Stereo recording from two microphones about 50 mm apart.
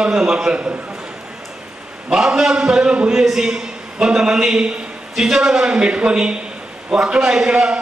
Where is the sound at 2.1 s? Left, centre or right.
Centre.